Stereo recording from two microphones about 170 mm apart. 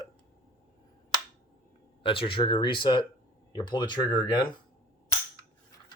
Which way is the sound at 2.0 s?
30° left (ahead or behind).